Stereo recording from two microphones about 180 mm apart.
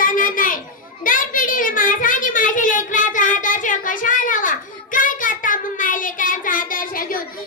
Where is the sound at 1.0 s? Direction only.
50° left (ahead or behind).